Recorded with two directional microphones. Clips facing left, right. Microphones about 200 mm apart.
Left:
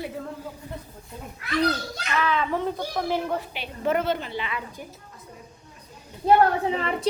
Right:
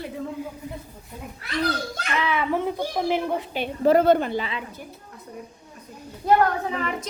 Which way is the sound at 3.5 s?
45° right (ahead or behind).